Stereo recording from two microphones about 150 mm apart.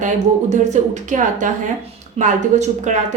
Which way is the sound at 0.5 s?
55° right (ahead or behind).